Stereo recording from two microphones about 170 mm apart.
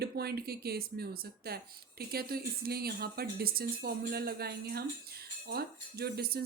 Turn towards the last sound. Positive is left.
turn(degrees=-65)  # may be behind; listen again after turning